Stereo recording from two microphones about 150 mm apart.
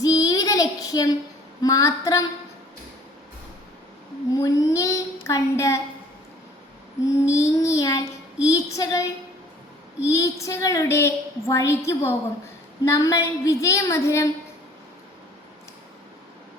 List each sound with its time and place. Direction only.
0.0 s child singing: 25° left (ahead or behind)
1.6 s a woman's voice: 20° left (ahead or behind)
4.4 s a woman's voice: 20° left (ahead or behind)
7.3 s a woman's voice: 20° left (ahead or behind)
10.1 s a woman's voice: 20° left (ahead or behind)